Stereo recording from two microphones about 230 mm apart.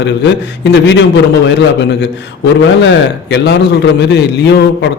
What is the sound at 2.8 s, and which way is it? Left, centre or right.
A man's voice, left.